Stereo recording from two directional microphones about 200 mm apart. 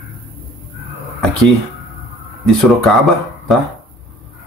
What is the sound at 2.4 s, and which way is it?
Speech, centre (ahead or behind).